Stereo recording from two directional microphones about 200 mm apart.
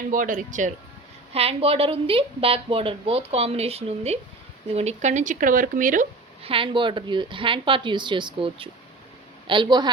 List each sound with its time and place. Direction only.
0.1 s a woman's voice: 40° right (ahead or behind)
6.4 s a woman's voice: 25° right (ahead or behind)